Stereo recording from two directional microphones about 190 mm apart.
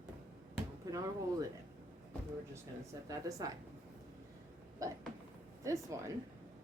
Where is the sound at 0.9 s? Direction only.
20° right (ahead or behind).